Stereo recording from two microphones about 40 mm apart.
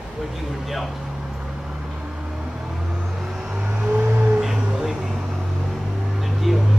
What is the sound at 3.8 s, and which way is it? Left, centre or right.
Vehicle, right.